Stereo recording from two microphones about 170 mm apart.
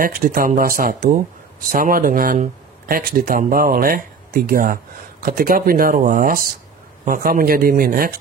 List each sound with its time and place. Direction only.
0.0 s speech: 55° right (ahead or behind)